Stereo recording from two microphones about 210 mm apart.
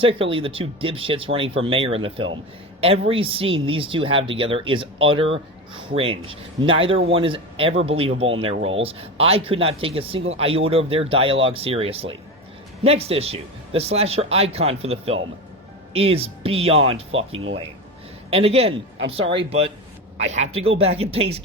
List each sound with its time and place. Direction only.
0.0 s speech: 25° right (ahead or behind)
18.3 s speech: 30° right (ahead or behind)